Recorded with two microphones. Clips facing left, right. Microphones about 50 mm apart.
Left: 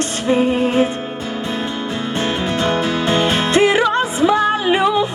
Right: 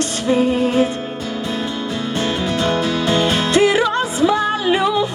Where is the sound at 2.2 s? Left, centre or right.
Left.